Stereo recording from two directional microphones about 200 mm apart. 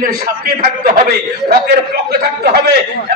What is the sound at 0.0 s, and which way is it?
A man's voice, 45° right (ahead or behind).